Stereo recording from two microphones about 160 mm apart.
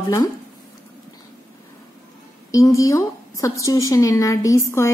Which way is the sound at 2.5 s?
20° left (ahead or behind).